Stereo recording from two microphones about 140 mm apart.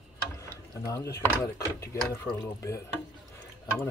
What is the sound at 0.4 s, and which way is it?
Speech, 20° left (ahead or behind).